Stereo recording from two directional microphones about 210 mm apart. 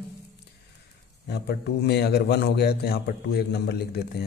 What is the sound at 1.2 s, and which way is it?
A man's voice, 50° left (ahead or behind).